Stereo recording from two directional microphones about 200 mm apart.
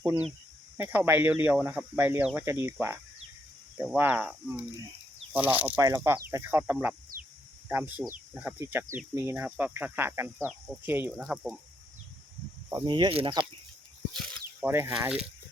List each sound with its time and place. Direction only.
0.8 s speech: 10° right (ahead or behind)
12.7 s speech: 25° right (ahead or behind)
14.1 s a sound: centre (ahead or behind)
14.7 s speech: 10° right (ahead or behind)